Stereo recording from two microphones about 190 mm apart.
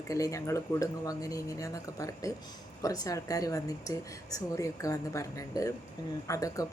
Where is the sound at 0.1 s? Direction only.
15° left (ahead or behind).